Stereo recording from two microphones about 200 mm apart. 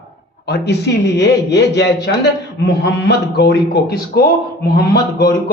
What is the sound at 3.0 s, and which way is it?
A man's voice, 55° left (ahead or behind).